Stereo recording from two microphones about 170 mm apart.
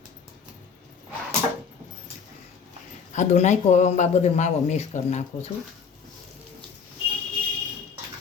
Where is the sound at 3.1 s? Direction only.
45° left (ahead or behind).